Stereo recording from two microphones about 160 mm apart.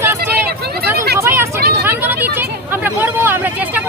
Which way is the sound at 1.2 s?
15° right (ahead or behind).